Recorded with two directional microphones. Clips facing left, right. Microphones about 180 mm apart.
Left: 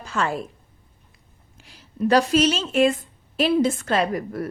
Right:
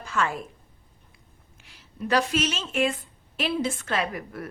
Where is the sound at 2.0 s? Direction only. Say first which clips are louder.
Left 7 dB; 35° left (ahead or behind).